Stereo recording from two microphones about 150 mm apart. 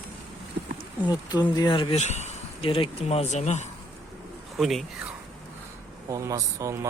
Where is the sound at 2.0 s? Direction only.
50° left (ahead or behind).